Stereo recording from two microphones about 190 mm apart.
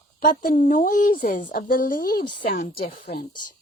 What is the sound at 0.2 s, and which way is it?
Speech, 45° left (ahead or behind).